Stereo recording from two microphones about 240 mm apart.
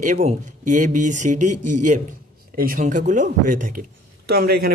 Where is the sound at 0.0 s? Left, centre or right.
Right.